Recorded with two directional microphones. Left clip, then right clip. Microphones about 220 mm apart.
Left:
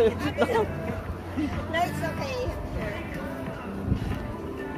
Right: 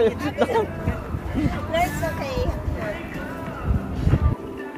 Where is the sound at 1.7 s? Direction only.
30° right (ahead or behind).